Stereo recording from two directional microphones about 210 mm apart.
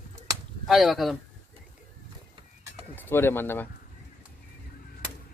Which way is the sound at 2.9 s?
10° left (ahead or behind).